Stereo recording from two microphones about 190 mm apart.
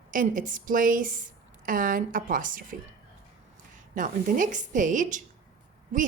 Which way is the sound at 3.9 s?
45° right (ahead or behind).